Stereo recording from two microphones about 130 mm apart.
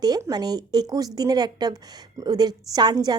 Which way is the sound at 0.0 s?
30° right (ahead or behind).